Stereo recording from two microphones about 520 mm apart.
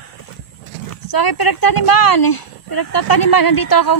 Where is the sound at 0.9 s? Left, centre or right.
Left.